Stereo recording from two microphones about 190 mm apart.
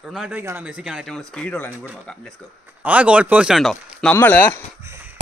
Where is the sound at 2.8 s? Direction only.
5° right (ahead or behind).